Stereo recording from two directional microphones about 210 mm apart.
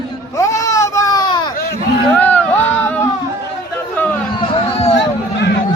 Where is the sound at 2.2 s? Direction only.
5° left (ahead or behind).